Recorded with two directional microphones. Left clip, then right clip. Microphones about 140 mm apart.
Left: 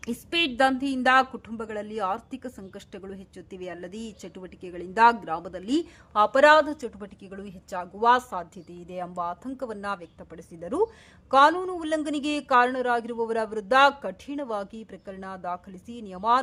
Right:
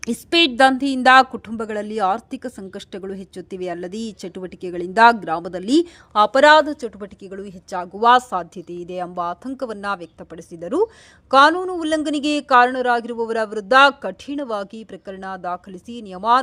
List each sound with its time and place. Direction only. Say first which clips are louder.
0.0 s a woman's voice: right 9 dB; 40° right (ahead or behind)